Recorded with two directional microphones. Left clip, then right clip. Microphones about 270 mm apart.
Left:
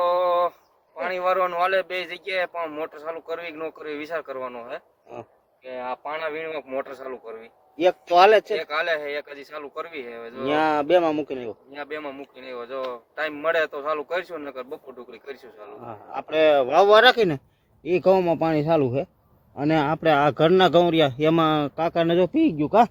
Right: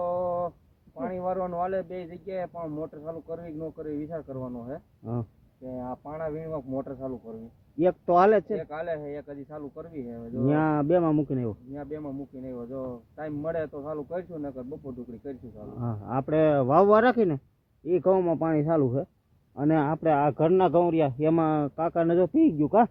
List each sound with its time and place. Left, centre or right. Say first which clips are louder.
0.0 s a sound: left 8 dB; left
0.9 s a man's voice: left 8 dB; centre
5.7 s a man's voice: left 7 dB; centre
15.9 s a man's voice: right 1 dB; centre